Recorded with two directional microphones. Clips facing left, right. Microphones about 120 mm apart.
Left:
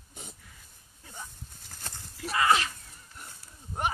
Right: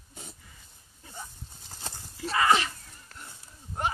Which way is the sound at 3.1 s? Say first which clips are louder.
Right 1 dB; 90° right.